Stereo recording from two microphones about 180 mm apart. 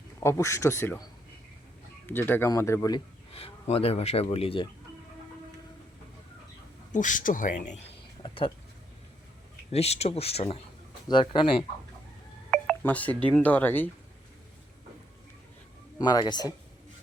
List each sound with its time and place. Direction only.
0.2 s speech: 15° left (ahead or behind)
2.0 s speech: 10° left (ahead or behind)
3.3 s speech: 35° left (ahead or behind)
6.9 s speech: 45° left (ahead or behind)
8.2 s a sound: 30° left (ahead or behind)
9.7 s speech: 35° left (ahead or behind)
12.5 s speech: 5° left (ahead or behind)
16.0 s speech: 20° left (ahead or behind)